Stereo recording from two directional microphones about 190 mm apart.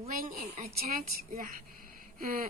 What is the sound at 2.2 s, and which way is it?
Speech, 50° right (ahead or behind).